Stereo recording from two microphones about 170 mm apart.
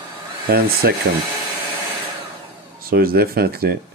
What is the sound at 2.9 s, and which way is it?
Speech, 60° right (ahead or behind).